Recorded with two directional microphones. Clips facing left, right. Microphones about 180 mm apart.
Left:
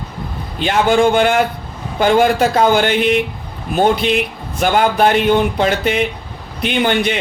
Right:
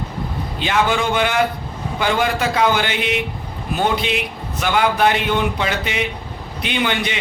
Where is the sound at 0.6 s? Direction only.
45° left (ahead or behind).